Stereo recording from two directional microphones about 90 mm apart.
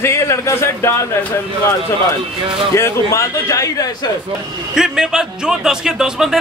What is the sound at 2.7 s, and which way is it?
A man's voice, 30° left (ahead or behind).